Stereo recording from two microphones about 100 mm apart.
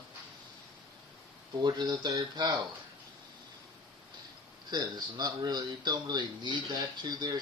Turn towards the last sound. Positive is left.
turn(degrees=-40)  # may be behind; listen again after turning